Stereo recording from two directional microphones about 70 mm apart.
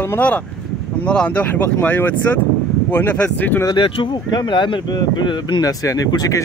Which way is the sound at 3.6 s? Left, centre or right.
Left.